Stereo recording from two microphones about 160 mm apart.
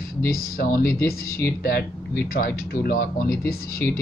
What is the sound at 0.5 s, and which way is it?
Speech, 65° left (ahead or behind).